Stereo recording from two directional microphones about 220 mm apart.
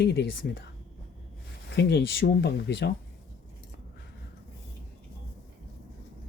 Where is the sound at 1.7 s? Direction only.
50° left (ahead or behind).